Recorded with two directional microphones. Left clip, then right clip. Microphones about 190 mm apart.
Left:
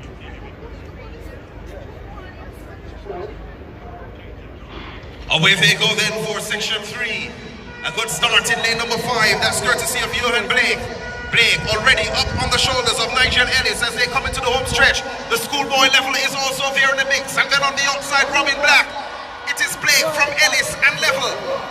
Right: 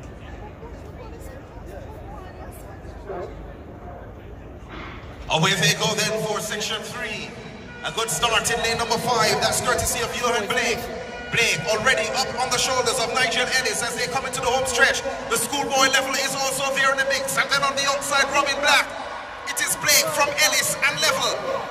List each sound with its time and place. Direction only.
5.3 s a man's voice: 25° right (ahead or behind); by 21.4 s 60° right (ahead or behind)